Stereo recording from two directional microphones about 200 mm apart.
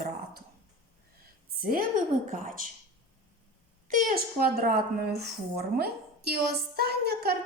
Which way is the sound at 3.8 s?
45° right (ahead or behind).